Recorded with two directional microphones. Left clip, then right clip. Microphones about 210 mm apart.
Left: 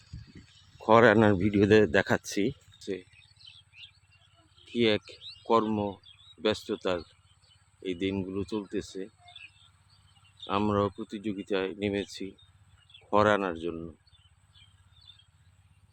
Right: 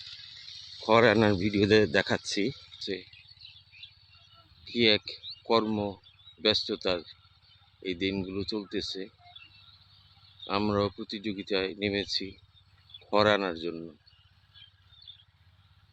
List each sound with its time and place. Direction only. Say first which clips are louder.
0.1 s a sound: right 11 dB; 30° right (ahead or behind)
0.9 s speech: left 2 dB; 20° left (ahead or behind)
4.6 s speech: right 2 dB; 10° left (ahead or behind)
10.4 s speech: left 1 dB; 10° left (ahead or behind)